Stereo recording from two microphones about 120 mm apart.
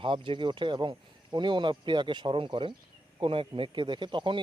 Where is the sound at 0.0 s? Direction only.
40° right (ahead or behind).